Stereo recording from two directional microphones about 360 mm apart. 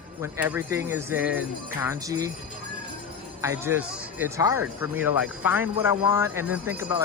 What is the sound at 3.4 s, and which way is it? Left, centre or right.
Speech, centre.